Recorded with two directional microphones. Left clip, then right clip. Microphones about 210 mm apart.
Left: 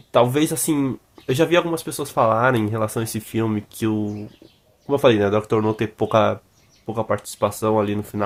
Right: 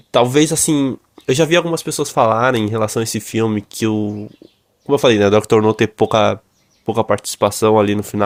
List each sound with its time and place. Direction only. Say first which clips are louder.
0.1 s speech: right 4 dB; 35° right (ahead or behind)